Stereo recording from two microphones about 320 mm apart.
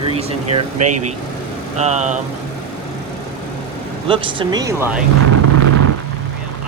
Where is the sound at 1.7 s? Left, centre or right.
Right.